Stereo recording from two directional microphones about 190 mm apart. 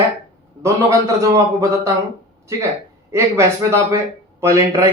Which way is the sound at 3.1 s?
15° right (ahead or behind).